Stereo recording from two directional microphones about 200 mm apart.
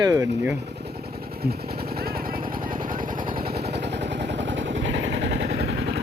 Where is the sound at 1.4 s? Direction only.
50° right (ahead or behind).